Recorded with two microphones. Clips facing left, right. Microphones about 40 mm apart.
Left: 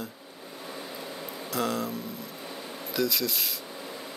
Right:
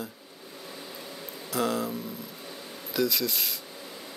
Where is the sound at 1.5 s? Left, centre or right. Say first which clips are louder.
Right 1 dB; centre.